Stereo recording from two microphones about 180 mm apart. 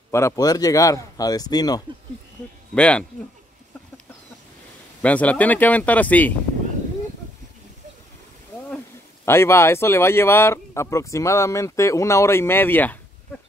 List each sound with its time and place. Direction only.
0.1 s speech: 20° left (ahead or behind)
2.7 s speech: 5° left (ahead or behind)
5.0 s speech: 10° left (ahead or behind)
9.2 s speech: 15° left (ahead or behind)